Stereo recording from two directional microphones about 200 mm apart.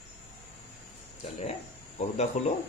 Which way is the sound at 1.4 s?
30° left (ahead or behind).